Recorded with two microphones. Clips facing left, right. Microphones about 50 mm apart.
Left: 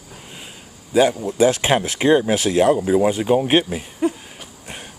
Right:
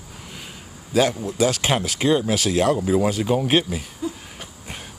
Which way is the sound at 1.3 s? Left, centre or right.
Left.